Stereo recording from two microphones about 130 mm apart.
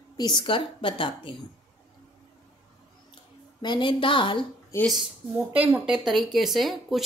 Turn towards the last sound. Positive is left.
turn(degrees=0)  # may be behind; listen again after turning